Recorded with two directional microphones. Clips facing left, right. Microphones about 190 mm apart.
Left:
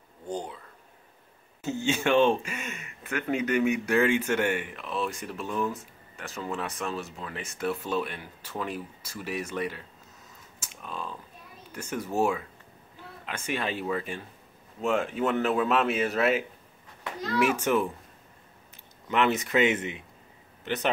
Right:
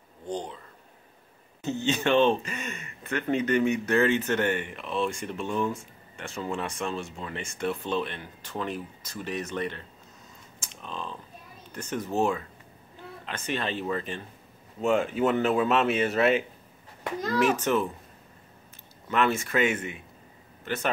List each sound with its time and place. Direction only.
0.3 s a sound: 10° left (ahead or behind)
1.6 s speech: 10° left (ahead or behind)
10.6 s typing: 10° left (ahead or behind)
11.7 s speech: 10° left (ahead or behind)
17.4 s speech: 10° left (ahead or behind)
19.0 s a man's voice: 20° left (ahead or behind)